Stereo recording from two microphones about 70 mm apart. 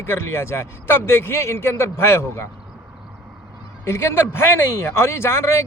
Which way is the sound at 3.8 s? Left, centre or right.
Left.